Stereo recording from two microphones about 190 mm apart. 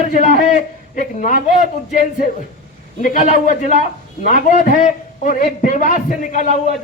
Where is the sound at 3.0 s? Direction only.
45° left (ahead or behind).